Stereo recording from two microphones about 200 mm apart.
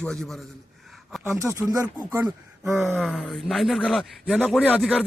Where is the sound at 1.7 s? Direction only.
15° right (ahead or behind).